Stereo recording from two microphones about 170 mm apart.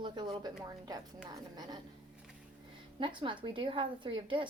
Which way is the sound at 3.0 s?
30° right (ahead or behind).